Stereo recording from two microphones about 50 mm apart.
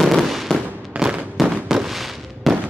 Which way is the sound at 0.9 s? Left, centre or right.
Right.